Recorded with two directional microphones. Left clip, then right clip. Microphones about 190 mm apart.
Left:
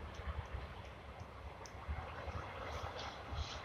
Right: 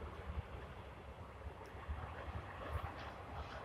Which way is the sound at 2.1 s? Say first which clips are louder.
Left 3 dB; 30° left (ahead or behind).